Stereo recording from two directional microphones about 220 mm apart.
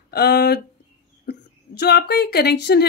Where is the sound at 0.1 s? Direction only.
45° left (ahead or behind).